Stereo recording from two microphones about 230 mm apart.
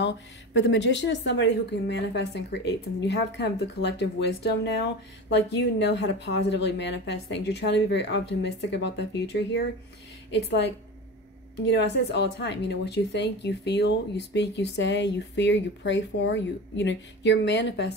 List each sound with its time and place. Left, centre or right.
0.0 s speech: left